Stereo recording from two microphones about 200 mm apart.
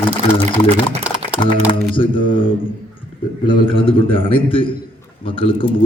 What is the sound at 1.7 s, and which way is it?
A man's voice, 25° left (ahead or behind).